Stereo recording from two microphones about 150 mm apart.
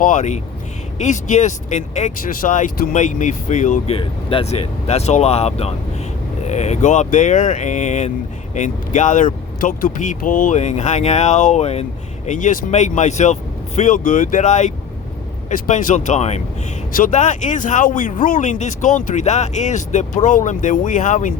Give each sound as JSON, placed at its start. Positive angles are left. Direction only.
{"t": 0.0, "sound": "speech", "side_deg": 55}
{"t": 3.9, "sound": "speech", "side_deg": 35}
{"t": 16.9, "sound": "speech", "side_deg": 60}